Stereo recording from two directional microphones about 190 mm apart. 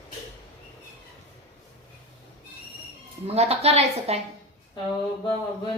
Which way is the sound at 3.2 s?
35° right (ahead or behind).